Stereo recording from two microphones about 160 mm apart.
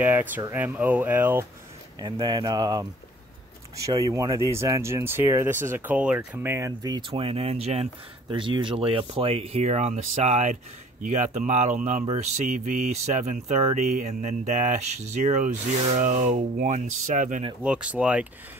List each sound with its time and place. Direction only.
0.0 s speech: 10° right (ahead or behind)
2.0 s speech: 30° right (ahead or behind); by 17.4 s 50° right (ahead or behind)
17.6 s speech: 5° right (ahead or behind)